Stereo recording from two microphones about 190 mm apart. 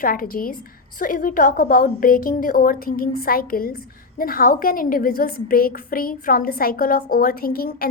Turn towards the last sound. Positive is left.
turn(degrees=55)  # may be behind; listen again after turning